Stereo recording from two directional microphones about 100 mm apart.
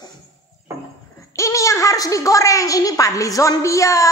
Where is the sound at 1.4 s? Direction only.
30° left (ahead or behind).